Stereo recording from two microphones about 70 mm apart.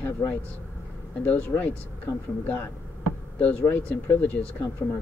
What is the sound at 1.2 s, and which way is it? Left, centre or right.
Speech, left.